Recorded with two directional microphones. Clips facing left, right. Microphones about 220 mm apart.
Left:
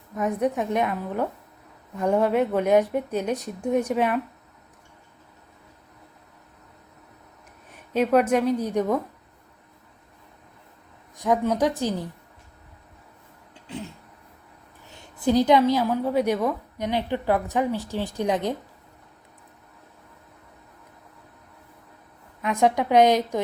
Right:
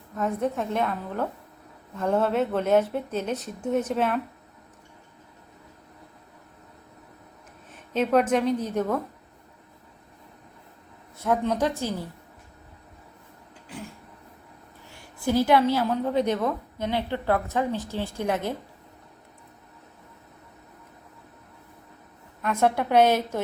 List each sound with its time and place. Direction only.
0.2 s a woman's voice: 15° left (ahead or behind)
8.1 s a woman's voice: 10° left (ahead or behind)
11.2 s a woman's voice: 15° left (ahead or behind)
13.7 s a sound: 25° left (ahead or behind)
14.8 s a woman's voice: 20° left (ahead or behind)
22.4 s a woman's voice: 15° left (ahead or behind)